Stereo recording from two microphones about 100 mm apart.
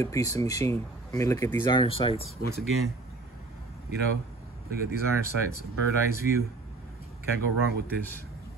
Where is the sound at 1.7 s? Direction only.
60° left (ahead or behind).